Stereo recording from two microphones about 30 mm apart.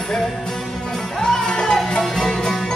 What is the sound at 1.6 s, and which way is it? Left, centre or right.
Music, centre.